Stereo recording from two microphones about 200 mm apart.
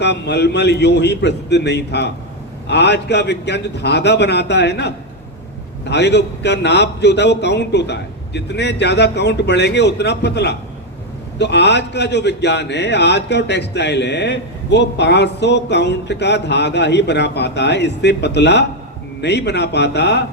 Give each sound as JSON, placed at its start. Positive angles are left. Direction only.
{"t": 0.0, "sound": "a man's voice", "side_deg": 55}